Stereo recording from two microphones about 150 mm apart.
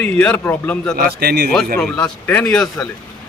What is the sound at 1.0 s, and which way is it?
Speech, 90° right.